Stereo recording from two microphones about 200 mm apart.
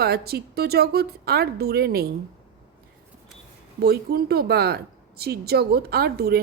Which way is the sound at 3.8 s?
50° right (ahead or behind).